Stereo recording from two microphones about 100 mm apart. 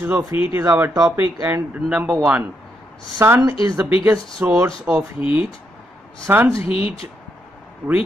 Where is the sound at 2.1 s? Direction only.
5° right (ahead or behind).